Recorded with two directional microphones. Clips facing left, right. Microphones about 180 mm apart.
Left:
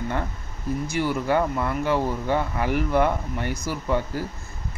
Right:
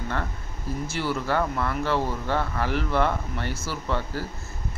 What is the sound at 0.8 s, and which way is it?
Speech, 15° left (ahead or behind).